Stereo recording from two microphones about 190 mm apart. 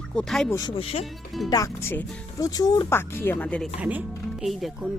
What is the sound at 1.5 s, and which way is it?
Speech, 20° left (ahead or behind).